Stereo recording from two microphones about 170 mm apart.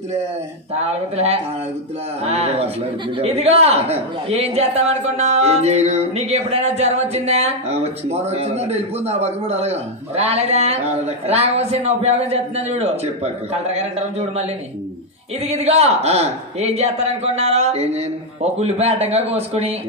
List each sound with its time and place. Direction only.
0.7 s a man's voice: 40° right (ahead or behind)